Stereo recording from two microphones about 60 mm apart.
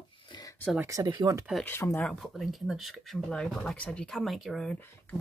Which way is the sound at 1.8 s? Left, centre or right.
Left.